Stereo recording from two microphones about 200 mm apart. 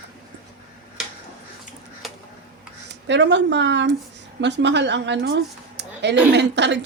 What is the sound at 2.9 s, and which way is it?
A woman's voice, 60° right (ahead or behind).